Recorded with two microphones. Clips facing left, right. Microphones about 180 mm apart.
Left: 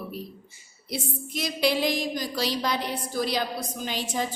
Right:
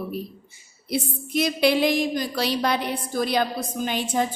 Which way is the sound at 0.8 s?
60° right (ahead or behind).